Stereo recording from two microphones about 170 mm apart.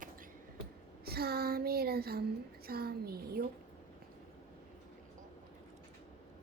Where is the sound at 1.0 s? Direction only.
65° right (ahead or behind).